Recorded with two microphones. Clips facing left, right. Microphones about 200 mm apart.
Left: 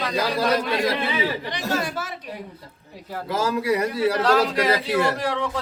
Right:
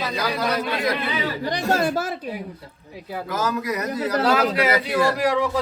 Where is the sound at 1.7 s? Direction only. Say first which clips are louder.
Right 5 dB; 40° right (ahead or behind).